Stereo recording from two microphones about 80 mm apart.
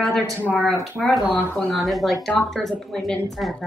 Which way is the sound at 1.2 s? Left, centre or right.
Centre.